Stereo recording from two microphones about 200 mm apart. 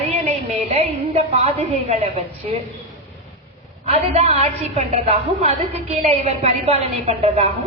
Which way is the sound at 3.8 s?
30° right (ahead or behind).